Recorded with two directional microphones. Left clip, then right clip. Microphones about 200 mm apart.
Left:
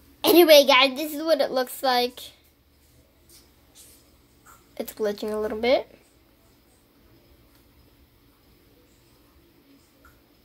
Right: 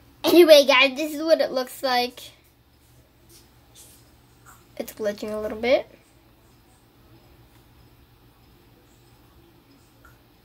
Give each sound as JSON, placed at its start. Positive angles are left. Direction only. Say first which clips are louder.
{"t": 0.2, "sound": "a woman's voice", "louder": "right 1 dB", "side_deg": 10}
{"t": 4.7, "sound": "a woman's voice", "louder": "even", "side_deg": 0}